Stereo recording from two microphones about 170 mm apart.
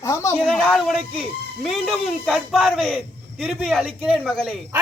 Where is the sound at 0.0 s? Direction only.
15° left (ahead or behind).